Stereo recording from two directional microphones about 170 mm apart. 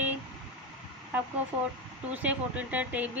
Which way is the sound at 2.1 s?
10° right (ahead or behind).